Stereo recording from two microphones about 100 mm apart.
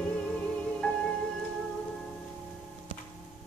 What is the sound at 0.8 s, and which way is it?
Music, 15° left (ahead or behind).